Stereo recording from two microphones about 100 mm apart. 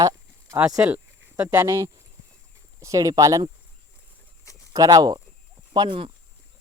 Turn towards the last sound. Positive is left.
turn(degrees=-55)  # may be behind; listen again after turning